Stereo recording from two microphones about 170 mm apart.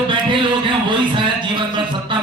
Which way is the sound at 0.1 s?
30° right (ahead or behind).